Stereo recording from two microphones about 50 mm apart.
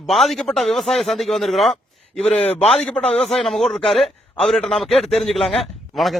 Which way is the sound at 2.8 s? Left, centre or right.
Centre.